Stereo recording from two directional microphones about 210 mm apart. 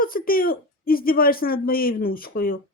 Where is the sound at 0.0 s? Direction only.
45° left (ahead or behind).